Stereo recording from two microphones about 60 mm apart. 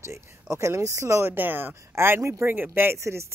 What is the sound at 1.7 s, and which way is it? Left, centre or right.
Speech, right.